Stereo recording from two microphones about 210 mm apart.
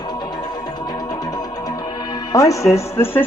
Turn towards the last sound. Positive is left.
turn(degrees=10)  # may be behind; listen again after turning